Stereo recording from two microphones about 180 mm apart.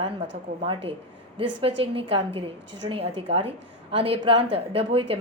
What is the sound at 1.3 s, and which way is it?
A woman's voice, 30° right (ahead or behind).